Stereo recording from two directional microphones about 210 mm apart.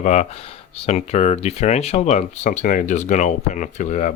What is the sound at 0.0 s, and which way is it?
Speech, 35° left (ahead or behind).